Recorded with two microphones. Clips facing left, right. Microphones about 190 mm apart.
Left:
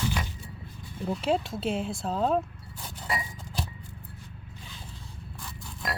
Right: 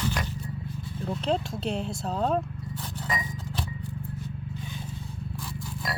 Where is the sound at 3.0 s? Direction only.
10° left (ahead or behind).